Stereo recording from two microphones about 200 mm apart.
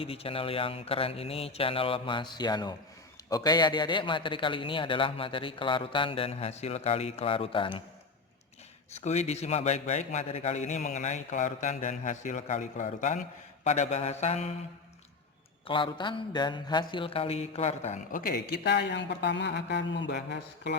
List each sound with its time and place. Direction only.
0.0 s speech: 30° left (ahead or behind)
9.0 s a man's voice: 35° left (ahead or behind)
15.6 s mantra: 25° left (ahead or behind); by 20.7 s 55° left (ahead or behind)